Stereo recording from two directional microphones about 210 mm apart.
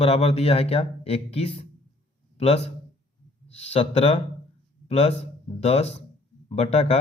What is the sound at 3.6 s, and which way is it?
Speech, 30° left (ahead or behind).